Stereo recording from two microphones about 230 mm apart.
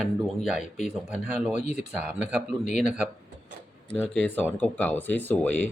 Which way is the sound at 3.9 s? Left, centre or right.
Centre.